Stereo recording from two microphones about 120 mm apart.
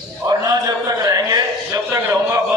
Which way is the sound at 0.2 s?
30° right (ahead or behind).